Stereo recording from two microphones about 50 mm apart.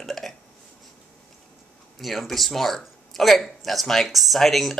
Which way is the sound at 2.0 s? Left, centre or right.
Centre.